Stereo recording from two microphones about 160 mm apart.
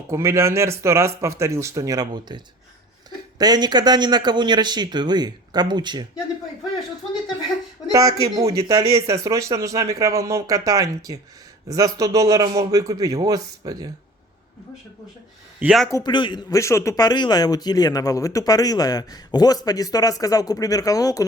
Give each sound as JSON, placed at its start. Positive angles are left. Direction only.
{"t": 0.1, "sound": "a man's voice", "side_deg": -15}
{"t": 7.9, "sound": "speech", "side_deg": -20}
{"t": 15.6, "sound": "speech", "side_deg": 0}
{"t": 15.9, "sound": "speech", "side_deg": 25}